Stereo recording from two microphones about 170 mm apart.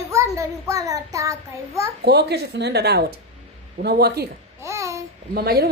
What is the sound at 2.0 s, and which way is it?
A woman's voice, 75° right (ahead or behind).